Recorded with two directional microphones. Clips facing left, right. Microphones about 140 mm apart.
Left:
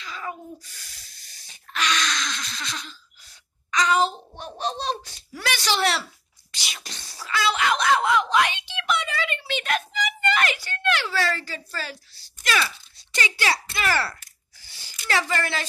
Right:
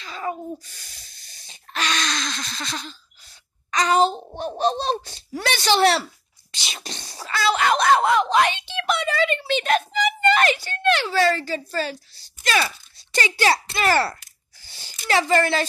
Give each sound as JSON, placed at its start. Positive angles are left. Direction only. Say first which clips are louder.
{"t": 0.0, "sound": "a sound", "louder": "right 5 dB", "side_deg": -35}
{"t": 3.7, "sound": "a child's voice", "louder": "right 3 dB", "side_deg": -35}
{"t": 7.2, "sound": "speech", "louder": "right 3 dB", "side_deg": -35}
{"t": 12.4, "sound": "speech", "louder": "right 3 dB", "side_deg": -45}